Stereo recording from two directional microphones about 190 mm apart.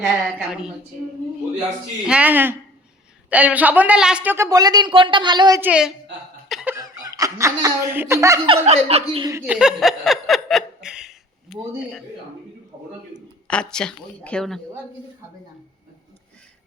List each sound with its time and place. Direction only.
0.0 s a woman's voice: 5° right (ahead or behind)
2.0 s a woman's voice: 5° right (ahead or behind); by 5.5 s 25° right (ahead or behind)
5.5 s a woman's voice: 5° right (ahead or behind)
6.5 s cough: 5° right (ahead or behind)
6.7 s speech: 15° right (ahead or behind)
8.4 s speech: 35° right (ahead or behind)
9.3 s speech: 5° right (ahead or behind)
13.5 s a woman's voice: 5° left (ahead or behind)